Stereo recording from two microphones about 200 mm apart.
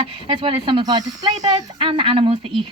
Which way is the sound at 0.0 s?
25° right (ahead or behind).